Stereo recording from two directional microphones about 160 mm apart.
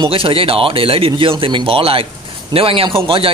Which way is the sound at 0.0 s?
35° right (ahead or behind).